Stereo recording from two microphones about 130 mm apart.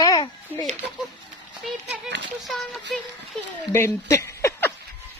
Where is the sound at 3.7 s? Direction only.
20° left (ahead or behind).